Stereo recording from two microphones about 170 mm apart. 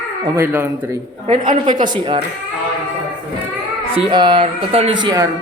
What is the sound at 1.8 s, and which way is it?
Speech, 25° right (ahead or behind).